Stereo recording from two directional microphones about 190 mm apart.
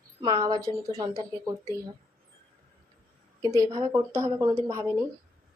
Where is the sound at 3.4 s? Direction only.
15° right (ahead or behind).